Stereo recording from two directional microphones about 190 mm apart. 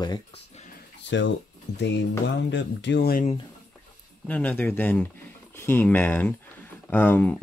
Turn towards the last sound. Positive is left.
turn(degrees=10)  # may be behind; listen again after turning